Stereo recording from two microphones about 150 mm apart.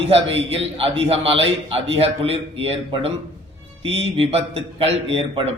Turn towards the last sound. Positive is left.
turn(degrees=-40)  # may be behind; listen again after turning